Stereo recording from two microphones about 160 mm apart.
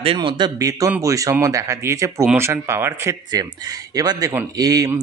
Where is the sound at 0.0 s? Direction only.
35° right (ahead or behind).